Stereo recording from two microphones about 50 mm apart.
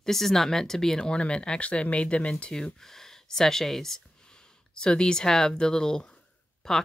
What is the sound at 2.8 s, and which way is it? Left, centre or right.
Speech, centre.